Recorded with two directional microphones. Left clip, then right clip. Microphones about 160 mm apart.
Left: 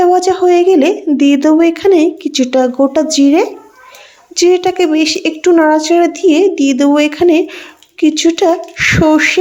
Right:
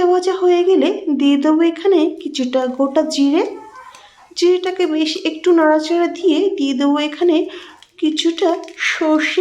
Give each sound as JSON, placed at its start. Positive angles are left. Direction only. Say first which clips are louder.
{"t": 0.0, "sound": "speech", "louder": "left 5 dB", "side_deg": 30}